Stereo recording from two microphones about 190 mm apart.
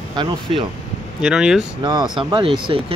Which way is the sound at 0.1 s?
25° right (ahead or behind).